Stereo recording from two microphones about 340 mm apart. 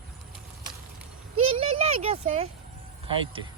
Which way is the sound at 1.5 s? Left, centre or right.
Centre.